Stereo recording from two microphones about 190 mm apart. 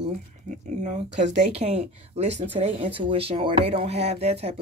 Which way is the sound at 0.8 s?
40° right (ahead or behind).